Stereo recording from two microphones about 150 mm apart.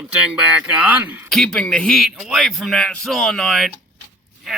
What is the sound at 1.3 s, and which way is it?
Speech, 5° left (ahead or behind).